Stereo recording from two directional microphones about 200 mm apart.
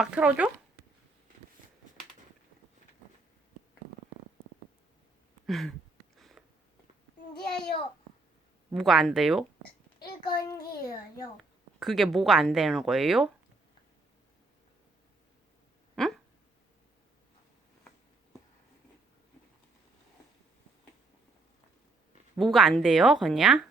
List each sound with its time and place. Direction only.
0.0 s speech: 5° right (ahead or behind)
5.5 s a sound: centre (ahead or behind)
8.7 s speech: centre (ahead or behind)
10.0 s a child's voice: 20° left (ahead or behind)
11.8 s speech: centre (ahead or behind)
16.0 s a sound: 5° left (ahead or behind)
22.4 s speech: centre (ahead or behind)